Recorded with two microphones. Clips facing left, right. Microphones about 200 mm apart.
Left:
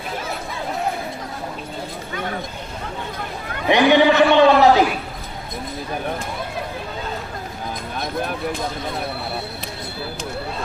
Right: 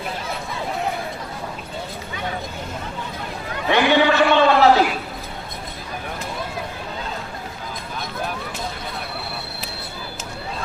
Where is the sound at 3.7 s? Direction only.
15° left (ahead or behind).